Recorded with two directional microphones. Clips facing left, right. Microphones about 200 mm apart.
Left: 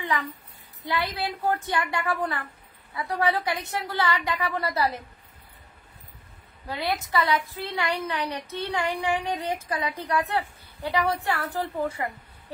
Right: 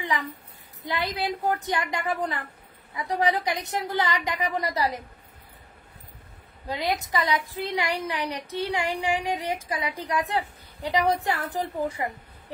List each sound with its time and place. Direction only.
1.1 s a woman's voice: 15° right (ahead or behind)
6.7 s a woman's voice: 15° right (ahead or behind)